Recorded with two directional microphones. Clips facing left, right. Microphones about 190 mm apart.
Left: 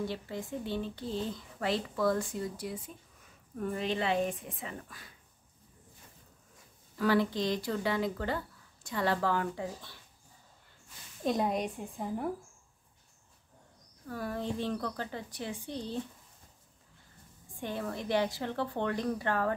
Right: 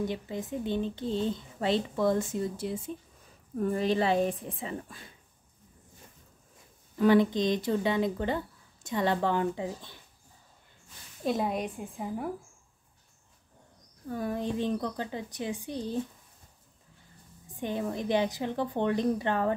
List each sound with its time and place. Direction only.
0.0 s speech: 20° right (ahead or behind)
3.5 s speech: 40° right (ahead or behind)
7.0 s speech: 20° right (ahead or behind)
11.2 s a woman's voice: centre (ahead or behind)
14.0 s a woman's voice: 20° right (ahead or behind)
17.6 s a woman's voice: 15° right (ahead or behind)